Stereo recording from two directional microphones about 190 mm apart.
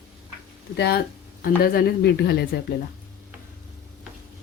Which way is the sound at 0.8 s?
60° left (ahead or behind).